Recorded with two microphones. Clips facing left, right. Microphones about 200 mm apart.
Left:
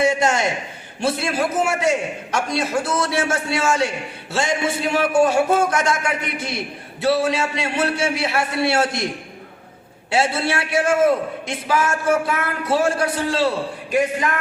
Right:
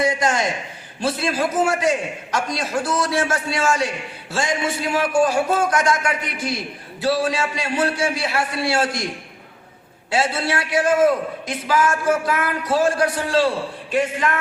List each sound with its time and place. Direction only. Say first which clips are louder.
0.0 s a man's voice: left 2 dB; 25° left (ahead or behind)
10.1 s a man's voice: left 1 dB; 25° left (ahead or behind)